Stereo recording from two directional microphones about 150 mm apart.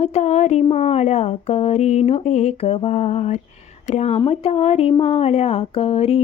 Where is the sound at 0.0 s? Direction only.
45° left (ahead or behind).